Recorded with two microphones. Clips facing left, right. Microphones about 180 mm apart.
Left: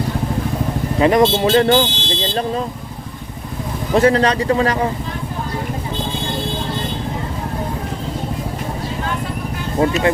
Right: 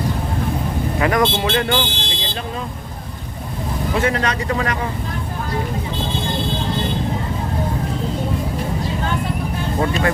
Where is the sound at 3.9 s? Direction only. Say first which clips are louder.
Left 7 dB; 35° left (ahead or behind).